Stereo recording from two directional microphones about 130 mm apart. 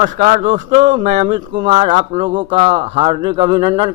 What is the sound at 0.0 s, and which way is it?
A man's voice, 75° right (ahead or behind).